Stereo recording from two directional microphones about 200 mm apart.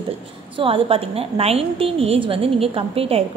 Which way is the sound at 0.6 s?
25° right (ahead or behind).